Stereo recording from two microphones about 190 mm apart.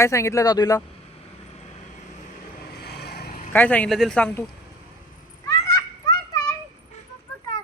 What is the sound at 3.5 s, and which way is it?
Speech, 10° left (ahead or behind).